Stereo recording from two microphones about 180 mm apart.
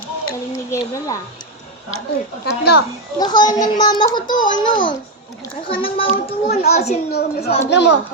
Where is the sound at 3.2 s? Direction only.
25° left (ahead or behind).